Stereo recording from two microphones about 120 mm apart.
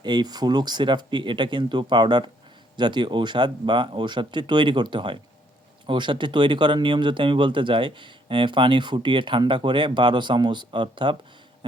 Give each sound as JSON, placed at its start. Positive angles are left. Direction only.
{"t": 0.0, "sound": "speech", "side_deg": -35}